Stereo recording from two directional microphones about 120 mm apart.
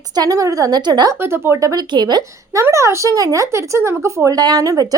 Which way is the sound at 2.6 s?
25° right (ahead or behind).